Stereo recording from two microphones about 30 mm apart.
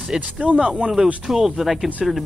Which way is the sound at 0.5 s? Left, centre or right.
Right.